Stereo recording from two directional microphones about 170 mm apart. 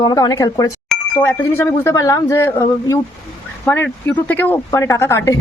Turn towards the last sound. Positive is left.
turn(degrees=20)  # may be behind; listen again after turning